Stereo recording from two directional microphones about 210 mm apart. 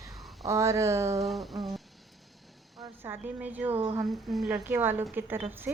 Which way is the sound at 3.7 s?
25° right (ahead or behind).